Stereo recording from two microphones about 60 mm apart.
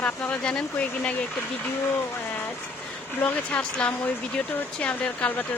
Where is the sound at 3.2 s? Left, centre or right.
Left.